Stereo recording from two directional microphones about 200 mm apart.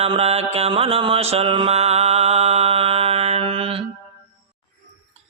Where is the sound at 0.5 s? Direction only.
30° right (ahead or behind).